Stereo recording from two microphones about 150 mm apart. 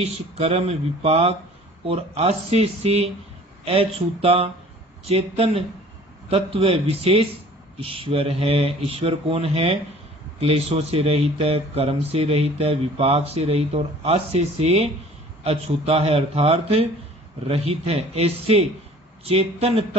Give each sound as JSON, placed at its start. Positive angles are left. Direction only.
{"t": 0.0, "sound": "speech", "side_deg": -40}